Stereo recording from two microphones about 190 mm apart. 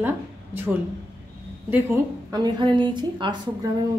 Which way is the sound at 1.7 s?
15° right (ahead or behind).